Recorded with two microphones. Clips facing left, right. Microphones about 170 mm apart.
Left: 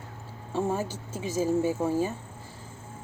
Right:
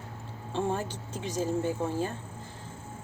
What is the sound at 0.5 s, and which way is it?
Speech, 10° left (ahead or behind).